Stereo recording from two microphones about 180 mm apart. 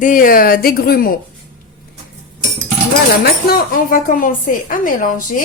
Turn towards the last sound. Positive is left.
turn(degrees=50)  # may be behind; listen again after turning